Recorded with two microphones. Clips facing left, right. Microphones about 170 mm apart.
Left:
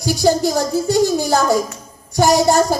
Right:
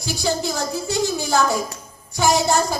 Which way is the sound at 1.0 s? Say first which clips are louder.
Left 3 dB; 55° left (ahead or behind).